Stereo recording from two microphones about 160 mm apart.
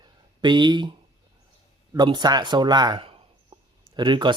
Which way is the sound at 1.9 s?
25° right (ahead or behind).